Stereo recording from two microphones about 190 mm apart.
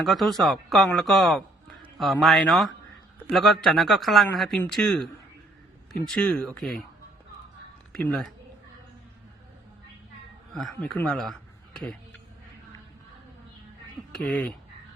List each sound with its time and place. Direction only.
0.0 s speech: centre (ahead or behind)
7.9 s speech: 5° left (ahead or behind)
10.5 s speech: centre (ahead or behind)
14.1 s speech: 5° left (ahead or behind)